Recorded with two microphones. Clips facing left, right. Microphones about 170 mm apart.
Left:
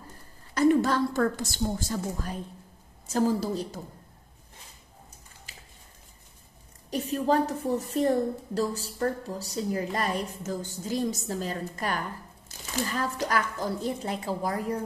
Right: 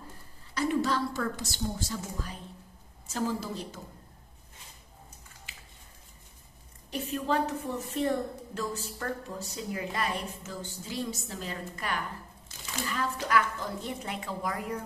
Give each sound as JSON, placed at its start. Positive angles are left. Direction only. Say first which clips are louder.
{"t": 0.6, "sound": "a woman's voice", "louder": "left 6 dB", "side_deg": 50}
{"t": 5.5, "sound": "a sound", "louder": "left 4 dB", "side_deg": 40}
{"t": 6.9, "sound": "a woman's voice", "louder": "left 5 dB", "side_deg": 40}